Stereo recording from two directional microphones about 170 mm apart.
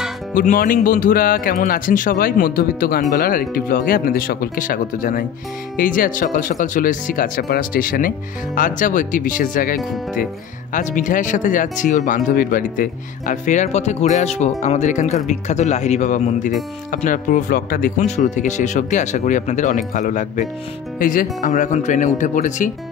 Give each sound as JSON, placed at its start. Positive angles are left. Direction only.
{"t": 0.3, "sound": "speech", "side_deg": 55}